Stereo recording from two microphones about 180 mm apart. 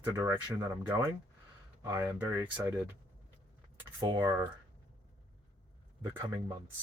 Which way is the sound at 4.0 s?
25° right (ahead or behind).